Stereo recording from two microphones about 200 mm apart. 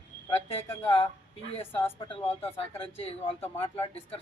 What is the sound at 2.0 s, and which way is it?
Speech, 25° left (ahead or behind).